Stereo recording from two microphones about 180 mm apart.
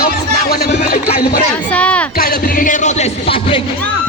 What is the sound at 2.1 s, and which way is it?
Speech, 55° left (ahead or behind).